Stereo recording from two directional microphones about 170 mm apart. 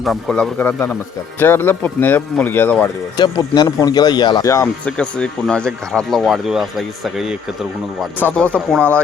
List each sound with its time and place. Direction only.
0.0 s speech: centre (ahead or behind)
3.2 s speech: 25° left (ahead or behind)
4.9 s speech: 5° left (ahead or behind)
8.2 s speech: 5° left (ahead or behind)